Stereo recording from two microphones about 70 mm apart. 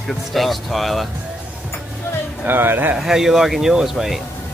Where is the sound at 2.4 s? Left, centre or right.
Right.